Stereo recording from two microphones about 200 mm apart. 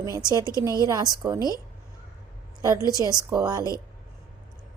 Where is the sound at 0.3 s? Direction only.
20° right (ahead or behind).